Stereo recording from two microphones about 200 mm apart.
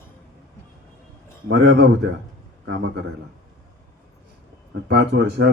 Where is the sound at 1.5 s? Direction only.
60° right (ahead or behind).